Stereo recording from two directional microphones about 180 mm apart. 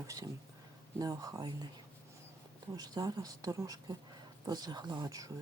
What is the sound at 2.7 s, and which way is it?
Speech, 20° right (ahead or behind).